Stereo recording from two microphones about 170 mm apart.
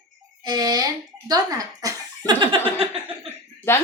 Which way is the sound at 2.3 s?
30° right (ahead or behind).